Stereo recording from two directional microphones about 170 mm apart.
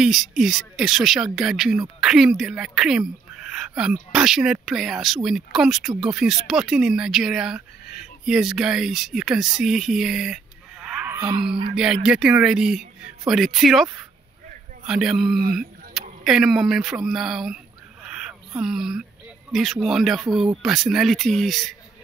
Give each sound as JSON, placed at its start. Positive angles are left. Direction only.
{"t": 0.0, "sound": "speech", "side_deg": 0}
{"t": 11.1, "sound": "speech", "side_deg": -25}
{"t": 11.7, "sound": "speech", "side_deg": -5}
{"t": 15.3, "sound": "speech", "side_deg": -60}
{"t": 15.9, "sound": "speech", "side_deg": -5}
{"t": 18.0, "sound": "a sound", "side_deg": -5}
{"t": 18.6, "sound": "speech", "side_deg": -5}